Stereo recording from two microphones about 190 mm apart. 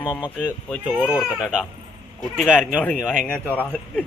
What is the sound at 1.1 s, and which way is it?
Speech, 5° right (ahead or behind).